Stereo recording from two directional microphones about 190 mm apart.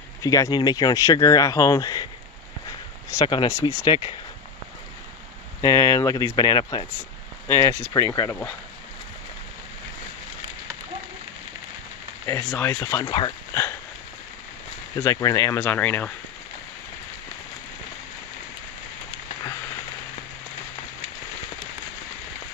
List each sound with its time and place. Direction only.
0.2 s speech: 20° left (ahead or behind)
3.1 s speech: 20° left (ahead or behind)
5.6 s speech: 15° left (ahead or behind)
12.4 s speech: 10° left (ahead or behind)
13.0 s speech: 25° left (ahead or behind)
15.0 s speech: 15° left (ahead or behind)